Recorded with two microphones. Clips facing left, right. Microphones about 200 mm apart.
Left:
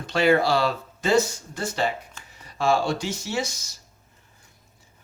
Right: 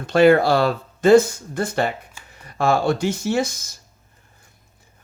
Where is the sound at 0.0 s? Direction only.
55° right (ahead or behind).